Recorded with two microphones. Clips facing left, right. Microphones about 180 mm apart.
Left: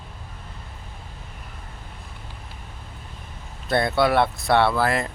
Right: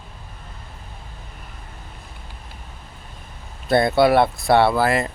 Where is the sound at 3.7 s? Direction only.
10° right (ahead or behind).